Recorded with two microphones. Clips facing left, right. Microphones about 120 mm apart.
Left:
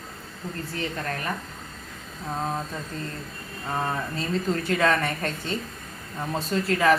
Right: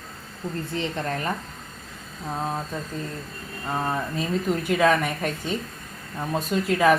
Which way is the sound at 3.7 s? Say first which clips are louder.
Right 2 dB; 10° right (ahead or behind).